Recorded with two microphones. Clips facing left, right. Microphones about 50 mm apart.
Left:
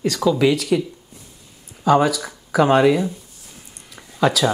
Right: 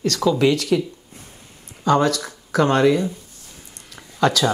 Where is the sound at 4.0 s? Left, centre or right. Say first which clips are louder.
Even; centre.